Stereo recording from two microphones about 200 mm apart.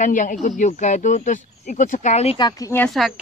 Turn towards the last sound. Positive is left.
turn(degrees=5)  # may be behind; listen again after turning